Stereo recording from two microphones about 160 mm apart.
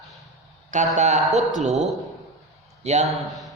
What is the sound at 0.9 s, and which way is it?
Speech, 45° right (ahead or behind).